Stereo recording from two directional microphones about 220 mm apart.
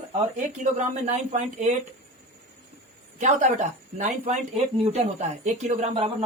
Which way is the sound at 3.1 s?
35° right (ahead or behind).